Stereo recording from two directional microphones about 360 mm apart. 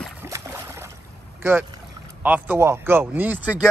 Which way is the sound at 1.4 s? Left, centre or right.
Centre.